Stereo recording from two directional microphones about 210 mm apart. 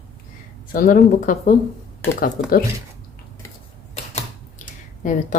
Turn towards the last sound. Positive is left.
turn(degrees=40)  # may be behind; listen again after turning